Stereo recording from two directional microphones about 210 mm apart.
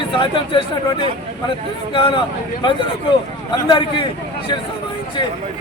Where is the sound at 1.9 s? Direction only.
25° left (ahead or behind).